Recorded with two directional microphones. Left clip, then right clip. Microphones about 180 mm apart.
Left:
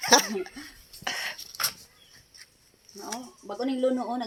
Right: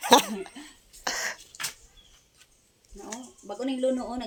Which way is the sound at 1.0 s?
60° right (ahead or behind).